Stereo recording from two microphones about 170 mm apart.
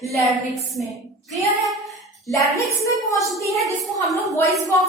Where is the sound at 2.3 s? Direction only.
20° left (ahead or behind).